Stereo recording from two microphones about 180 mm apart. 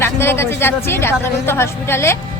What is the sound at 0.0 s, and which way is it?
Speech, 15° left (ahead or behind).